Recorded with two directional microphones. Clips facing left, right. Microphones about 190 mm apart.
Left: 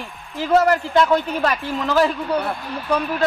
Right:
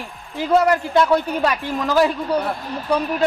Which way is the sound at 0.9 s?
10° right (ahead or behind).